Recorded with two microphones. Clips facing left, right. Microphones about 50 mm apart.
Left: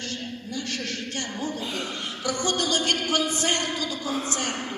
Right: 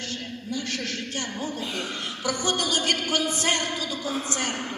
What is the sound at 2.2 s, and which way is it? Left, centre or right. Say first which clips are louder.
Speech: even; centre.